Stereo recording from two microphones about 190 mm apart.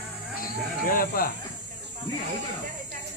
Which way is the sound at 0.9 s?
50° left (ahead or behind).